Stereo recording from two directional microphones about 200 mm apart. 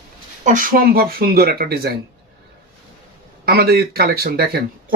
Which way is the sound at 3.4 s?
50° right (ahead or behind).